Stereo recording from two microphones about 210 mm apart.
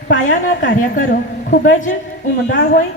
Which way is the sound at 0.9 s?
40° left (ahead or behind).